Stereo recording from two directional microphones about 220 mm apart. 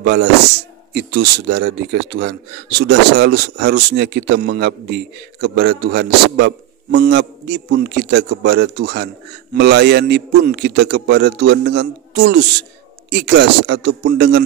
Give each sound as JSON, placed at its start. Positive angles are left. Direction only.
{"t": 0.0, "sound": "a man's voice", "side_deg": -50}
{"t": 1.5, "sound": "a man's voice", "side_deg": -50}